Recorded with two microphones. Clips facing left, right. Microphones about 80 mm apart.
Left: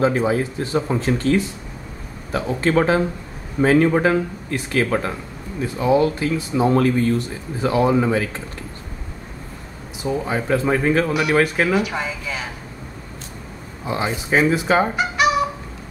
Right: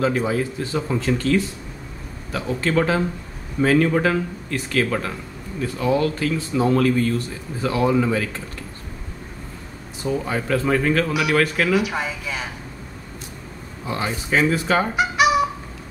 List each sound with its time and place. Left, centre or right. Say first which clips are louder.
0.0 s speech: left 3 dB; left
6.7 s speech: left 1 dB; left
10.0 s speech: left 1 dB; centre
11.7 s speech: even; centre
13.8 s speech: left 2 dB; centre
15.0 s fowl: right 1 dB; centre